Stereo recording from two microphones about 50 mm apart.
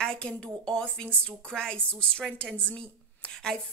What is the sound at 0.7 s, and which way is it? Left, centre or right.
A woman's voice, centre.